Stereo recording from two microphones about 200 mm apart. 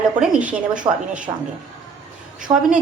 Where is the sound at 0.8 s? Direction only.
20° right (ahead or behind).